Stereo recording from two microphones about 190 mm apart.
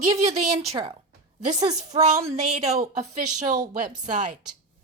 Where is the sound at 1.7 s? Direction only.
35° right (ahead or behind).